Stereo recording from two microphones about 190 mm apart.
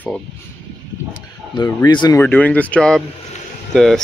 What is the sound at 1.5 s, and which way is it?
Speech, 20° left (ahead or behind).